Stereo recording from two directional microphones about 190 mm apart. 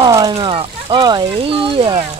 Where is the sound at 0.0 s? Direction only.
20° right (ahead or behind).